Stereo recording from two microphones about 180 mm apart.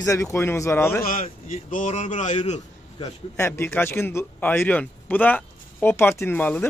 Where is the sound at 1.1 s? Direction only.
45° left (ahead or behind).